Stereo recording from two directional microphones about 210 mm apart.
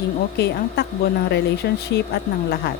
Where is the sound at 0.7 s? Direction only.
50° left (ahead or behind).